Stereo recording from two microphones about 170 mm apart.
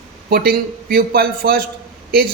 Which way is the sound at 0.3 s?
65° right (ahead or behind).